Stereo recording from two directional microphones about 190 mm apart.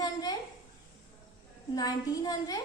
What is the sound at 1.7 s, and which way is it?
Speech, 20° left (ahead or behind).